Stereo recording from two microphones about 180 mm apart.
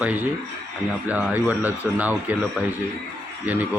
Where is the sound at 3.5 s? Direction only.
10° right (ahead or behind).